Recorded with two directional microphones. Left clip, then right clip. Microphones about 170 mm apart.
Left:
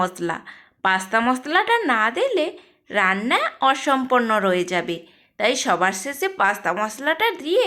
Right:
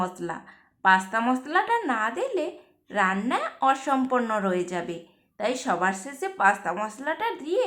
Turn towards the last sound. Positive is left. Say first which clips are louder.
# left 7 dB
turn(degrees=30)  # may be behind; listen again after turning